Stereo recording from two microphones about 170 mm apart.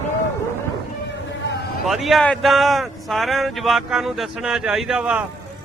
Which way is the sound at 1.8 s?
Centre (ahead or behind).